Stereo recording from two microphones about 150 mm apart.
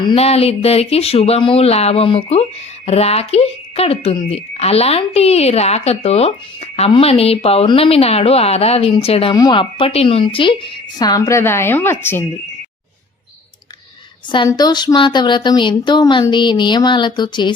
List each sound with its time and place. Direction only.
0.0 s speech: 35° left (ahead or behind)
9.3 s speech: 30° left (ahead or behind)
14.3 s speech: 30° left (ahead or behind)